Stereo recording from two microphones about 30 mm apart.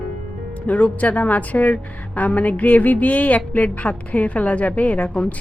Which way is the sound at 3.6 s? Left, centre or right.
Left.